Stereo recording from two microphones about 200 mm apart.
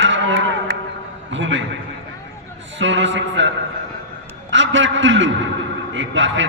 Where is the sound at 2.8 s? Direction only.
65° right (ahead or behind).